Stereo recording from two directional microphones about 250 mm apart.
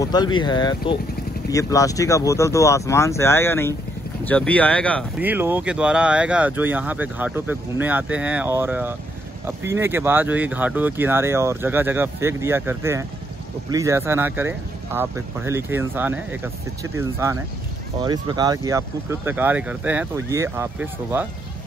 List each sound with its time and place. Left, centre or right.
0.0 s speech: centre
5.2 s speech: centre